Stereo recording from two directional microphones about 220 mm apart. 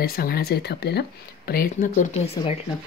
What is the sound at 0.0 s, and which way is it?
Speech, 45° left (ahead or behind).